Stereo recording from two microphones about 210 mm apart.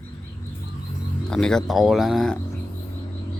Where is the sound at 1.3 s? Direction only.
5° left (ahead or behind).